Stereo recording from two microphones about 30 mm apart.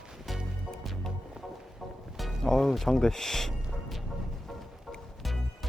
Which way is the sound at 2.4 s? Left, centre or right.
Centre.